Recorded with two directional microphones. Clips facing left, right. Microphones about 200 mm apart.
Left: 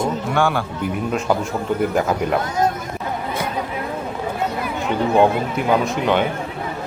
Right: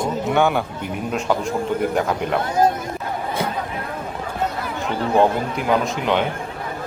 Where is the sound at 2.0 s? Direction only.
5° left (ahead or behind).